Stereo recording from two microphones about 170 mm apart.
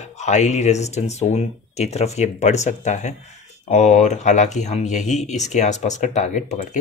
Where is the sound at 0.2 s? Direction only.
45° left (ahead or behind).